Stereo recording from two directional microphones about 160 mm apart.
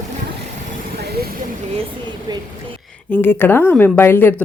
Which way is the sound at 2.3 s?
25° right (ahead or behind).